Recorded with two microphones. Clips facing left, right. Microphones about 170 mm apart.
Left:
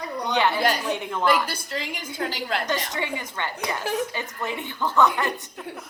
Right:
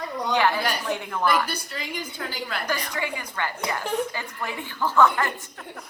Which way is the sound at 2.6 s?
20° left (ahead or behind).